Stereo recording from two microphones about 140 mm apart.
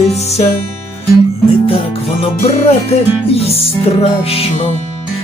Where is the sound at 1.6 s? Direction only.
40° left (ahead or behind).